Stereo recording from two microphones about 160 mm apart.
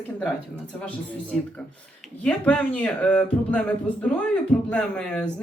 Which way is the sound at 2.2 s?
5° left (ahead or behind).